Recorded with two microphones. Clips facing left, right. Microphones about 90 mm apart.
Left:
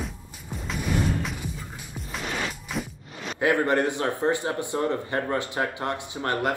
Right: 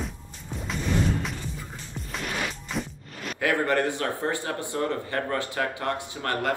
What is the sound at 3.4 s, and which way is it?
Speech, 20° left (ahead or behind).